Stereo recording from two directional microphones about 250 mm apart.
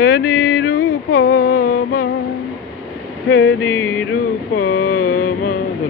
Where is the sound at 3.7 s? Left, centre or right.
Centre.